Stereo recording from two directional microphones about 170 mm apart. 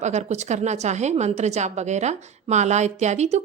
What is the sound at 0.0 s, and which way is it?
A woman's voice, 40° right (ahead or behind).